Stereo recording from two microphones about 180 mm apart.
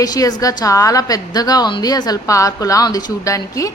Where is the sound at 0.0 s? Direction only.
20° left (ahead or behind).